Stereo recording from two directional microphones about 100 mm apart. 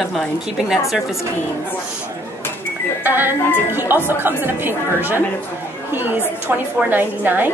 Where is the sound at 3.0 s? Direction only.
20° right (ahead or behind).